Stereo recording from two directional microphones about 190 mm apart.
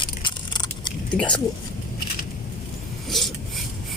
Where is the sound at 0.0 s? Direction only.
25° left (ahead or behind).